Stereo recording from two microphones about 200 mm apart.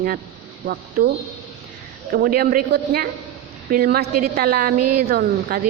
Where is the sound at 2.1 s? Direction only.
45° right (ahead or behind).